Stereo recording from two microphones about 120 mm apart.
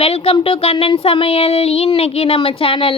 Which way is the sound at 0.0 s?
50° left (ahead or behind).